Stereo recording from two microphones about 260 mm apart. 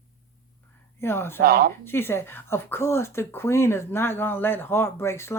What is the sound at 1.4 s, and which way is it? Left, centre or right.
Speech, right.